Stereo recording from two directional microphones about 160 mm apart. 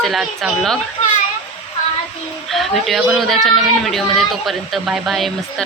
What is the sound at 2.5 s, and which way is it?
Speech, centre (ahead or behind).